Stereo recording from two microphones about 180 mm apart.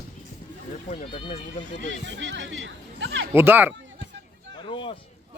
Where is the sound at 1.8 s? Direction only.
85° right.